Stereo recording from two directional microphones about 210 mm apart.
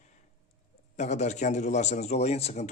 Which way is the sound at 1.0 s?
35° left (ahead or behind).